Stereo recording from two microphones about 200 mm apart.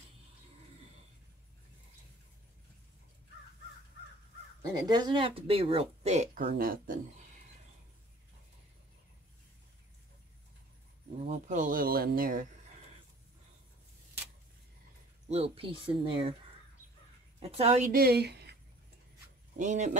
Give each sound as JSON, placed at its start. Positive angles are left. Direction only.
{"t": 4.6, "sound": "speech", "side_deg": -20}
{"t": 6.4, "sound": "speech", "side_deg": -50}
{"t": 11.2, "sound": "speech", "side_deg": -40}
{"t": 15.2, "sound": "speech", "side_deg": -30}
{"t": 17.4, "sound": "a woman's voice", "side_deg": -30}
{"t": 19.5, "sound": "speech", "side_deg": -40}